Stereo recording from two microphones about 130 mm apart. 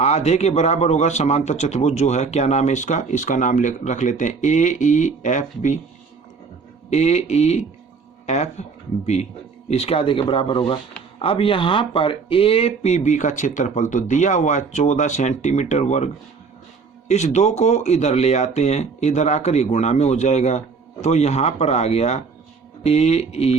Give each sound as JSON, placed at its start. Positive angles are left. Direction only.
{"t": 0.0, "sound": "a man's voice", "side_deg": 60}
{"t": 6.9, "sound": "a man's voice", "side_deg": 60}
{"t": 9.6, "sound": "a man's voice", "side_deg": 50}
{"t": 17.1, "sound": "a man's voice", "side_deg": 60}